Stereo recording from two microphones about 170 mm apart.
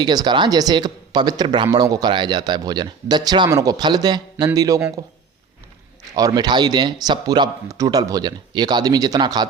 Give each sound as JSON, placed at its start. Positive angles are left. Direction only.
{"t": 0.0, "sound": "speech", "side_deg": -25}
{"t": 6.1, "sound": "speech", "side_deg": -25}